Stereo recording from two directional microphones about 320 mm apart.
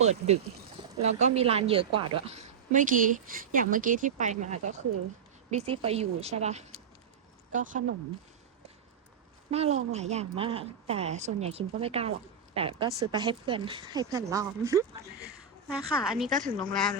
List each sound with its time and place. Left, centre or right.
0.0 s a woman's voice: right
9.5 s a woman's voice: centre